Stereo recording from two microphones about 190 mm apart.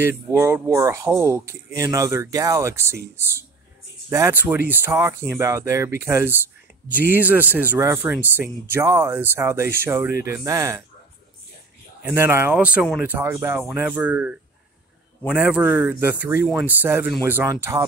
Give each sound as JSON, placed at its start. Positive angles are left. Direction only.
{"t": 0.3, "sound": "speech", "side_deg": -15}
{"t": 4.1, "sound": "speech", "side_deg": -10}
{"t": 12.0, "sound": "speech", "side_deg": -10}